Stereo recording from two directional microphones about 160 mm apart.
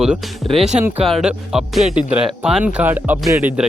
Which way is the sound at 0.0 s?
Centre (ahead or behind).